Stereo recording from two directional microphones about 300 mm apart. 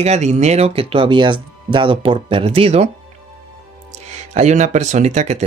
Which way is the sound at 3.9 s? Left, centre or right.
Right.